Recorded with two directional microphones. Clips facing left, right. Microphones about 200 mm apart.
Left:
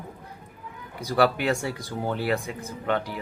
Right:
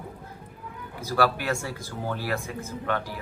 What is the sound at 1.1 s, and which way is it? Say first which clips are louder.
Speech: left 3 dB; 20° left (ahead or behind).